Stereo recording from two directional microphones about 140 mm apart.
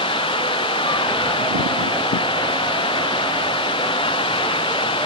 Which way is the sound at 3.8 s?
40° left (ahead or behind).